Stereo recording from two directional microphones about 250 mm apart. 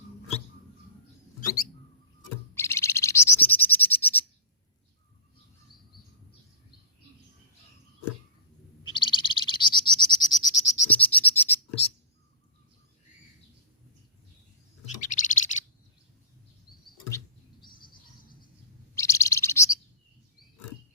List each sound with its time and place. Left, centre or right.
1.4 s rodents: left
2.6 s bird: centre
8.9 s bird: centre
14.8 s bird: left
17.1 s chirp: centre
18.9 s bird: centre